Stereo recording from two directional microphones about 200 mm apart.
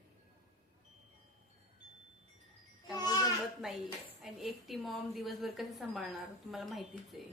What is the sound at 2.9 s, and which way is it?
Speech, 20° left (ahead or behind).